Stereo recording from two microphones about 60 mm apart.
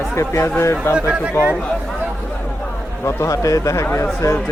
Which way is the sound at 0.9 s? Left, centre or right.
Right.